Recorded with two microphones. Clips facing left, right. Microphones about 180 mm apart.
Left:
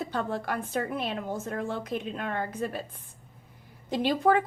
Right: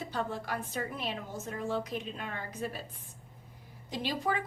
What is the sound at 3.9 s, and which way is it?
Speech, 55° left (ahead or behind).